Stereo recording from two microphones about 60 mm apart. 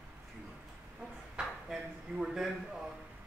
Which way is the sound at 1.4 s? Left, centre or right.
Centre.